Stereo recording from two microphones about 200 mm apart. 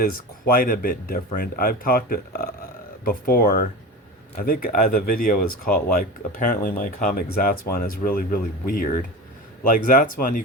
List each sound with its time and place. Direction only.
0.0 s speech: 45° left (ahead or behind)